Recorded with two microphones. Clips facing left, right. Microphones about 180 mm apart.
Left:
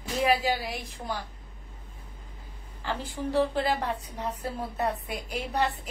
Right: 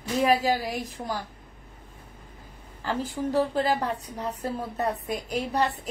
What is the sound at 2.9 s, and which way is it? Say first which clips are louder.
A woman's voice: right 3 dB; 40° right (ahead or behind).